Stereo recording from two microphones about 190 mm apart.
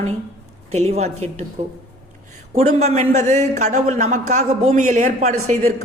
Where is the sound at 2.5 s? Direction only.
35° right (ahead or behind).